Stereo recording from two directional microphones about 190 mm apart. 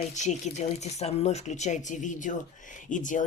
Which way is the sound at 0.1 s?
40° left (ahead or behind).